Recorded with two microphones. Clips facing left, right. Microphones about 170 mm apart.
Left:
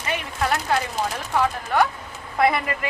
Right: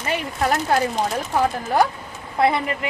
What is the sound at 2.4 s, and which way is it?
Speech, 25° right (ahead or behind).